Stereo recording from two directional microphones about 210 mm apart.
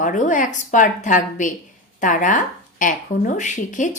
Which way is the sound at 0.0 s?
35° left (ahead or behind).